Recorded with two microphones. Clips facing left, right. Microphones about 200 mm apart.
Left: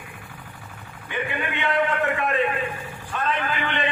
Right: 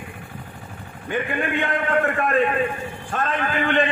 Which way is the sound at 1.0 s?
45° right (ahead or behind).